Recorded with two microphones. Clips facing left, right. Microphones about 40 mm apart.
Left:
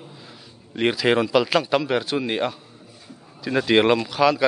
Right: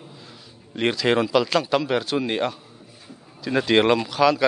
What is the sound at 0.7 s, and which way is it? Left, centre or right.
A man's voice, centre.